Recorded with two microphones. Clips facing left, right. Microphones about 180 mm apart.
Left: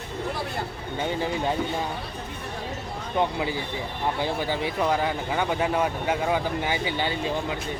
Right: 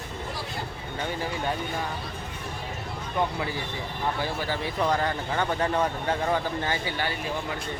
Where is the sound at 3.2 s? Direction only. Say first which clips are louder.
Left 3 dB; 20° left (ahead or behind).